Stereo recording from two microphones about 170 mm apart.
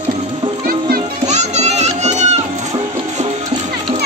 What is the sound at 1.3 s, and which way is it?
Music, 40° right (ahead or behind).